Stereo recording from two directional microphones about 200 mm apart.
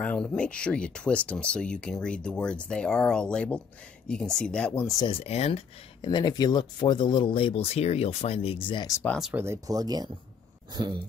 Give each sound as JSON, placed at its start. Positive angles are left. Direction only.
{"t": 0.0, "sound": "speech", "side_deg": 5}
{"t": 4.8, "sound": "speech", "side_deg": 20}
{"t": 6.0, "sound": "speech", "side_deg": 20}
{"t": 9.0, "sound": "speech", "side_deg": 5}
{"t": 9.3, "sound": "speech", "side_deg": -10}